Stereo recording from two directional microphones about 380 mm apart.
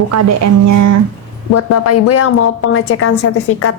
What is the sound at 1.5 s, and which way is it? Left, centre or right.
A woman's voice, left.